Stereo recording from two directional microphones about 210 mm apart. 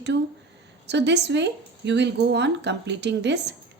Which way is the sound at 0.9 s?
55° right (ahead or behind).